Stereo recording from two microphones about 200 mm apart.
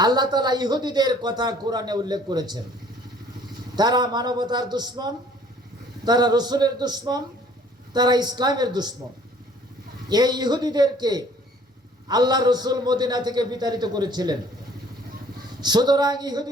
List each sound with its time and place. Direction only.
0.0 s a man's voice: 20° right (ahead or behind)
3.8 s a man's voice: 20° right (ahead or behind)
10.1 s a man's voice: 20° right (ahead or behind)
15.6 s a man's voice: 20° right (ahead or behind)